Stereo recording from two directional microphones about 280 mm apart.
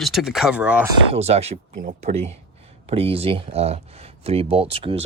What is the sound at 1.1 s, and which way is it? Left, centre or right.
Speech, right.